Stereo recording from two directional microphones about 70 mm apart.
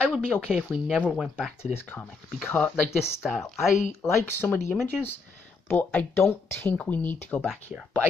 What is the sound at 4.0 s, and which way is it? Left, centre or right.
Speech, left.